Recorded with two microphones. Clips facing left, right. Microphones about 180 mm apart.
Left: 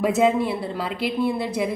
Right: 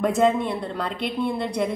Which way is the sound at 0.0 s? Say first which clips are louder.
Left 1 dB; 5° left (ahead or behind).